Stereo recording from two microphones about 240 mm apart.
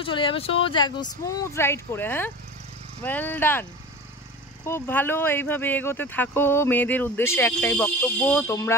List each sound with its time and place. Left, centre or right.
0.0 s speech: left
4.6 s speech: centre